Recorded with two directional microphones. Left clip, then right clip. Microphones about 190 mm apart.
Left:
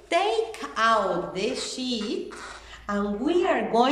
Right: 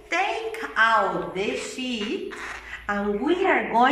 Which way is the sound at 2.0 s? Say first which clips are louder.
Right 2 dB; 10° right (ahead or behind).